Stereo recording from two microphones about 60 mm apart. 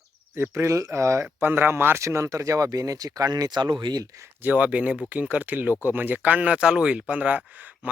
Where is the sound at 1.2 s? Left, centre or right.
Right.